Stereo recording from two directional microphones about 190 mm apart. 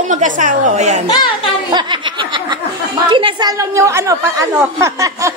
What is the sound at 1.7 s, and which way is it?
Snicker, 25° right (ahead or behind).